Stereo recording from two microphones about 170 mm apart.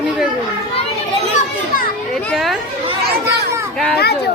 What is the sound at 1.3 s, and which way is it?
Children playing, 55° left (ahead or behind).